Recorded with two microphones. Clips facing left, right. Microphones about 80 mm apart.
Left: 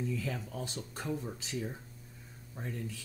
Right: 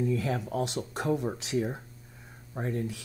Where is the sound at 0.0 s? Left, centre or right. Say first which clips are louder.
Right 8 dB; right.